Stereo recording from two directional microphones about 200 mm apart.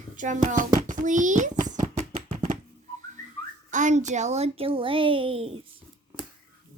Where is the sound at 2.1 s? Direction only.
35° right (ahead or behind).